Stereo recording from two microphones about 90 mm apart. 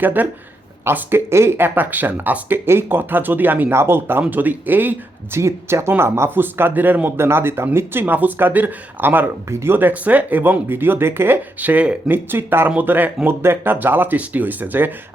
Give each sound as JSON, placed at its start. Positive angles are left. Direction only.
{"t": 0.0, "sound": "speech", "side_deg": -20}
{"t": 5.4, "sound": "speech", "side_deg": -30}